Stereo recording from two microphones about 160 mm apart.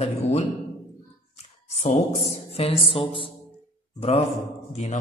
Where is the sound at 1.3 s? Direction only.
40° left (ahead or behind).